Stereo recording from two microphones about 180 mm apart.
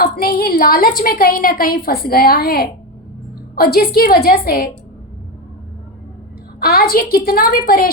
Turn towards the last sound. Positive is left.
turn(degrees=55)  # may be behind; listen again after turning